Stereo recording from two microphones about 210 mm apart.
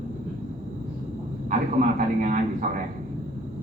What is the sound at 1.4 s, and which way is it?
A man's voice, 40° right (ahead or behind).